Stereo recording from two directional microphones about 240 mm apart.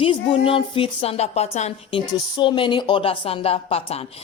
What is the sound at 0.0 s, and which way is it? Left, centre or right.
Speech, left.